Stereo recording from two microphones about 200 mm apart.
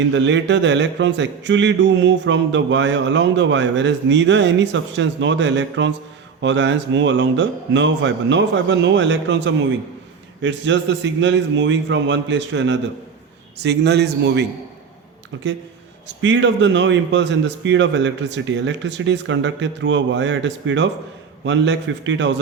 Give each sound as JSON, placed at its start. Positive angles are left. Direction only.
{"t": 0.1, "sound": "speech", "side_deg": -65}
{"t": 16.0, "sound": "speech", "side_deg": -65}